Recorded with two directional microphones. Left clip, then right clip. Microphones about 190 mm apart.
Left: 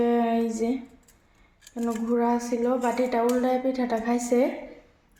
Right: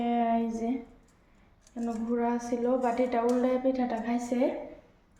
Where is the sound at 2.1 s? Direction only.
20° left (ahead or behind).